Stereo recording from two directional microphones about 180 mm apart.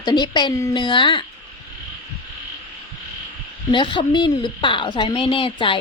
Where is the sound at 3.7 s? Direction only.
25° left (ahead or behind).